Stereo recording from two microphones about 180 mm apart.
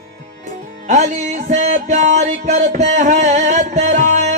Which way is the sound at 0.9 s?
40° right (ahead or behind).